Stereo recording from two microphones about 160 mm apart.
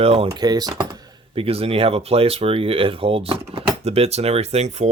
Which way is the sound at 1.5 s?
40° right (ahead or behind).